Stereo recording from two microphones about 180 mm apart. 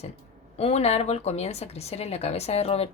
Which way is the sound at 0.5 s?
35° left (ahead or behind).